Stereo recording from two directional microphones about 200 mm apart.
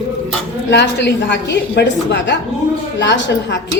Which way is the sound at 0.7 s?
60° left (ahead or behind).